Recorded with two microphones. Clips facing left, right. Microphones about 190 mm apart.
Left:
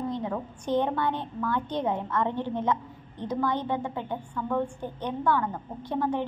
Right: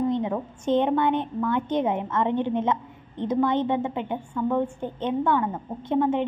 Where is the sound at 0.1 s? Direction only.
20° right (ahead or behind).